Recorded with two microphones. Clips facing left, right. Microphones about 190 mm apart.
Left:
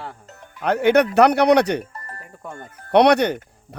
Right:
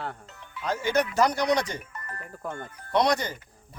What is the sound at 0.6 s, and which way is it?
Speech, 65° left (ahead or behind).